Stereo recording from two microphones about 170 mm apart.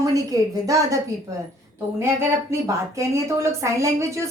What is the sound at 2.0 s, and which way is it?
A woman's voice, 15° right (ahead or behind).